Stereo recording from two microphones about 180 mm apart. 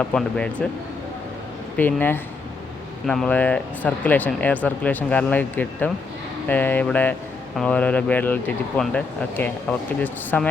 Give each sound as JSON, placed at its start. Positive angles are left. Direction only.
{"t": 0.0, "sound": "speech", "side_deg": 5}
{"t": 1.7, "sound": "speech", "side_deg": 10}